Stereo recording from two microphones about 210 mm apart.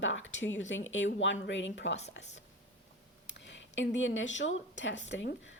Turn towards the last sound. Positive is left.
turn(degrees=55)  # may be behind; listen again after turning